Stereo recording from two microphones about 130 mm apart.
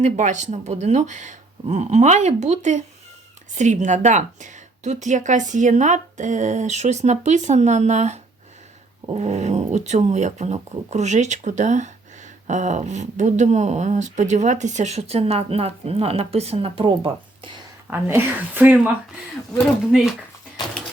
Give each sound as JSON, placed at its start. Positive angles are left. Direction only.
{"t": 0.0, "sound": "speech", "side_deg": -65}
{"t": 17.9, "sound": "speech", "side_deg": -15}
{"t": 19.9, "sound": "speech", "side_deg": 0}